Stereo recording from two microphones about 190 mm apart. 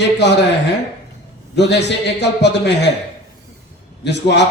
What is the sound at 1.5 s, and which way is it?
Speech, 65° left (ahead or behind).